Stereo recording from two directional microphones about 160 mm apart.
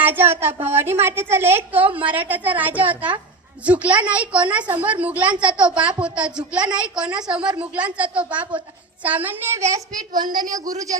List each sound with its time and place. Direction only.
0.0 s a woman's voice: 10° right (ahead or behind)